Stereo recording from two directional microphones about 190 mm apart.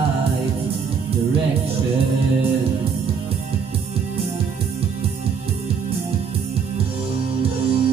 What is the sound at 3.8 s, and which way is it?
Music, 30° right (ahead or behind).